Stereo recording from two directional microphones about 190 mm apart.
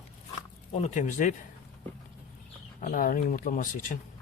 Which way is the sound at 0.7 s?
35° left (ahead or behind).